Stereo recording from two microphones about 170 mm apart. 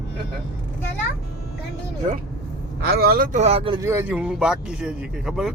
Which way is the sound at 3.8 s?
15° right (ahead or behind).